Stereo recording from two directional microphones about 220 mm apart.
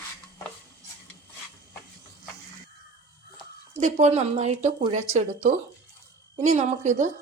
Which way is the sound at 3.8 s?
30° right (ahead or behind).